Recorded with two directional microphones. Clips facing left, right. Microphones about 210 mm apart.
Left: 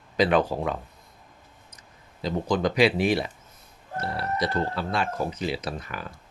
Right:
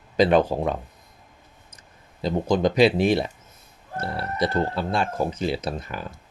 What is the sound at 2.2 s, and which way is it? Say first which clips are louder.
Speech: right 3 dB; 25° right (ahead or behind).